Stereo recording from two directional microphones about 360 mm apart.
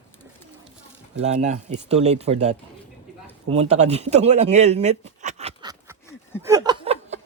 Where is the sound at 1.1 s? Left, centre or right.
Centre.